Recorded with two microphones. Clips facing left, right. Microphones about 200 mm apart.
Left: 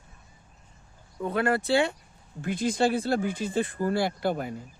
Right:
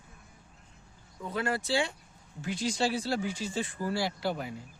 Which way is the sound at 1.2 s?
60° left (ahead or behind).